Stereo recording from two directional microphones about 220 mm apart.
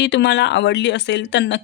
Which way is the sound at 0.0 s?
50° left (ahead or behind).